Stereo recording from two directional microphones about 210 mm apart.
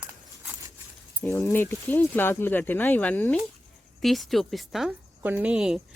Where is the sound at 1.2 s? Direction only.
10° left (ahead or behind).